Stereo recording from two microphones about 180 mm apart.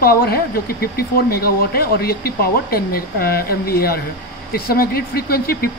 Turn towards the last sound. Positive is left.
turn(degrees=55)  # may be behind; listen again after turning